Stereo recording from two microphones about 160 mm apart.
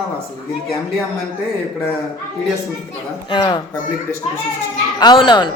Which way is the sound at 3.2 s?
30° left (ahead or behind).